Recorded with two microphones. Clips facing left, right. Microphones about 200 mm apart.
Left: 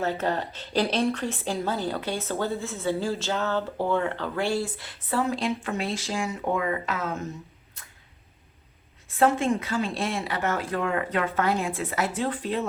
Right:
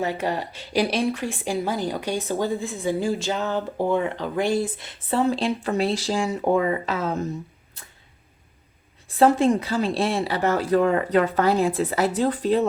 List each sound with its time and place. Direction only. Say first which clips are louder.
0.0 s a woman's voice: right 1 dB; 15° right (ahead or behind); by 7.3 s 35° right (ahead or behind)
7.8 s tick-tock: right 4 dB; 30° right (ahead or behind)
9.0 s speech: right 5 dB; 35° right (ahead or behind)